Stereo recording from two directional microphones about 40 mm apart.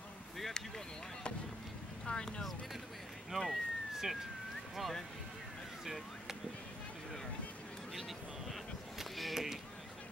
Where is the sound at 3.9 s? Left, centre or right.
Centre.